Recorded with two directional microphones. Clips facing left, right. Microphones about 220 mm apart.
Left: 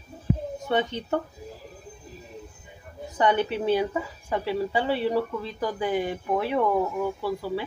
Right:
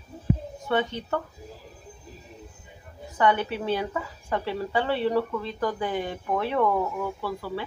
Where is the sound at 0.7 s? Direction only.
20° left (ahead or behind).